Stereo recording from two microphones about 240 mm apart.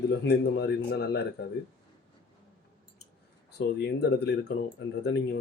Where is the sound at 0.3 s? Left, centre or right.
Left.